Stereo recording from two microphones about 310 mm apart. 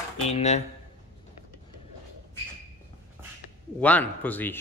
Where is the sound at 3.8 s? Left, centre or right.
Centre.